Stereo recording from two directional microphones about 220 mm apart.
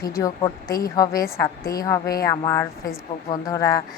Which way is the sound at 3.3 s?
15° left (ahead or behind).